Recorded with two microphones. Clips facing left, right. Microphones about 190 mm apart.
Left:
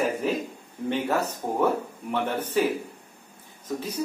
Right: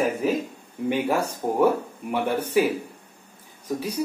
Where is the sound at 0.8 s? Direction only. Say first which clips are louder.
Right 2 dB; 10° right (ahead or behind).